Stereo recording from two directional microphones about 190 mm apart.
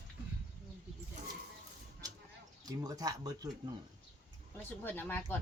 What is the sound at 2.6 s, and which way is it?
Speech, 20° right (ahead or behind).